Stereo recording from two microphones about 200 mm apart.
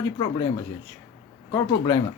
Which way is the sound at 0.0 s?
20° left (ahead or behind).